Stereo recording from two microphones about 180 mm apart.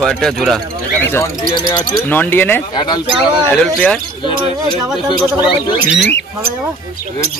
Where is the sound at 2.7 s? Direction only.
25° left (ahead or behind).